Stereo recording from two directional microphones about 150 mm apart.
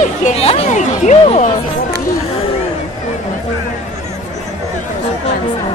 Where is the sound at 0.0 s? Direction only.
50° left (ahead or behind).